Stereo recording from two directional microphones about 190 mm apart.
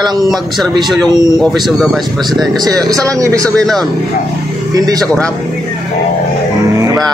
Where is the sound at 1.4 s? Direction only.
Centre (ahead or behind).